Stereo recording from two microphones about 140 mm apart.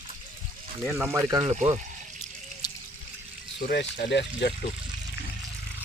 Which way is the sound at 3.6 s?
90° left.